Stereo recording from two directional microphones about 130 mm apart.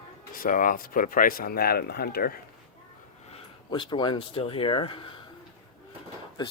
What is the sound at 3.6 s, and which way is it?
Speech, 35° left (ahead or behind).